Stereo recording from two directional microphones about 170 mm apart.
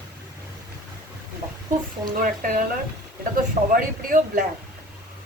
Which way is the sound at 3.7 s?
50° right (ahead or behind).